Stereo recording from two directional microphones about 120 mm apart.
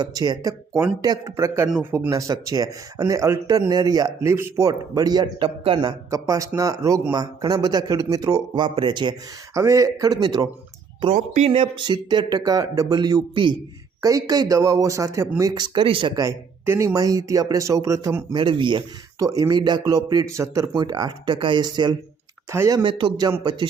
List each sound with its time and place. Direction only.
0.0 s speech: 35° right (ahead or behind); by 2.0 s 20° right (ahead or behind)
2.0 s speech: 30° right (ahead or behind); by 5.9 s 45° right (ahead or behind)
6.1 s speech: 30° right (ahead or behind)
9.6 s speech: 25° right (ahead or behind)
11.1 s speech: 70° right (ahead or behind)
11.5 s speech: 45° right (ahead or behind)
14.0 s speech: 30° right (ahead or behind); by 16.1 s 45° right (ahead or behind)
16.1 s speech: 25° right (ahead or behind)
18.3 s speech: 45° right (ahead or behind)
19.2 s speech: 30° right (ahead or behind)
22.5 s speech: 25° right (ahead or behind)
22.8 s speech: 45° right (ahead or behind)